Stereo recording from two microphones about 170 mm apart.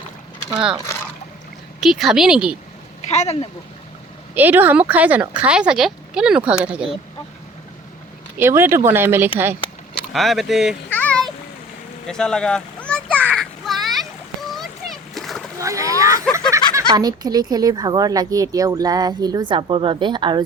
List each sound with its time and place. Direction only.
1.8 s speech: centre (ahead or behind)
3.1 s speech: 40° left (ahead or behind)
4.4 s speech: 10° right (ahead or behind)
8.4 s speech: 15° right (ahead or behind)
9.9 s speech: centre (ahead or behind)
10.8 s a sound: 5° left (ahead or behind)
14.5 s splash: centre (ahead or behind)
15.5 s splash: 20° right (ahead or behind)
16.5 s speech: 20° right (ahead or behind)